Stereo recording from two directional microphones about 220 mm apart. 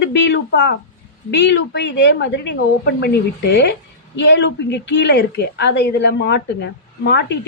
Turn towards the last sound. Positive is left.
turn(degrees=50)  # may be behind; listen again after turning